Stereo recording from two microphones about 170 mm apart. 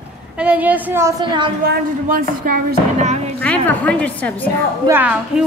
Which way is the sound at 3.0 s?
40° right (ahead or behind).